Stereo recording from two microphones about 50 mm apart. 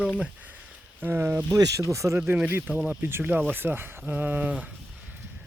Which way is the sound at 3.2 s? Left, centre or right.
Right.